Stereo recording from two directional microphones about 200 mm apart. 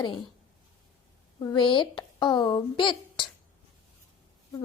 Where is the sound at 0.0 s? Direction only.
20° left (ahead or behind).